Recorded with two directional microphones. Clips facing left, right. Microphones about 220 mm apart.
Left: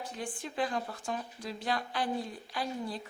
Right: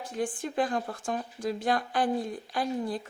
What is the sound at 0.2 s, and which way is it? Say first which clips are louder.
Speech: right 7 dB; 50° right (ahead or behind).